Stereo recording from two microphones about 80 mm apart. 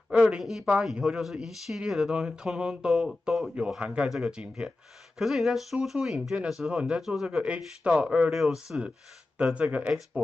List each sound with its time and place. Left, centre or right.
0.1 s speech: centre
7.0 s speech: centre
7.2 s speech: centre